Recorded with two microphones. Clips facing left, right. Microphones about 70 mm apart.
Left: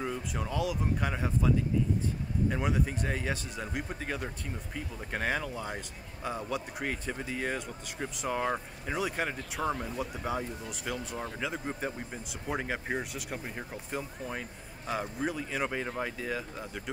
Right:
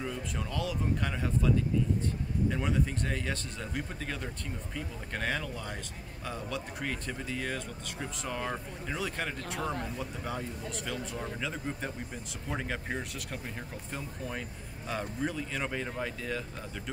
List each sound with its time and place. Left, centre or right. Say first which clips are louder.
0.0 s speech: left 2 dB; centre
2.5 s speech: even; centre